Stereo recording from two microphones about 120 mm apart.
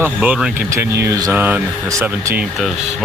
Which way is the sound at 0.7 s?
25° right (ahead or behind).